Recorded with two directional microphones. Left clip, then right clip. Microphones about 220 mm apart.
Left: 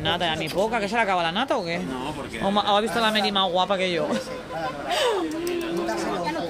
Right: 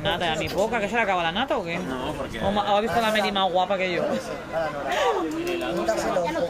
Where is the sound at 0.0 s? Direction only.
30° left (ahead or behind).